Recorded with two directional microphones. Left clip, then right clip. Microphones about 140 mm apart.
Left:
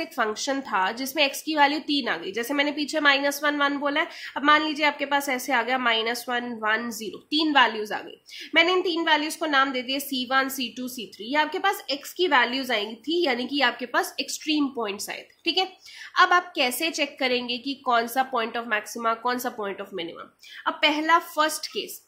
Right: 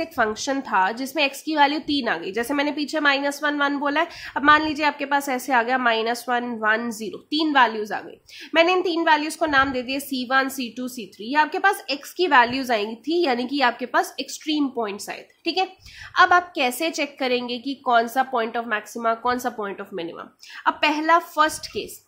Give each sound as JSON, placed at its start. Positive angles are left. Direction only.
{"t": 0.0, "sound": "a woman's voice", "side_deg": -35}